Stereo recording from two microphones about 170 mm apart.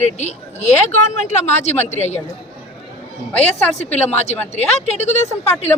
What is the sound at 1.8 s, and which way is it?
Speech, 40° left (ahead or behind).